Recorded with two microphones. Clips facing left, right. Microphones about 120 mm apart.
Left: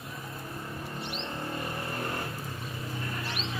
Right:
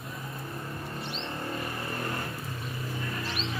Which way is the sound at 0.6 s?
Centre (ahead or behind).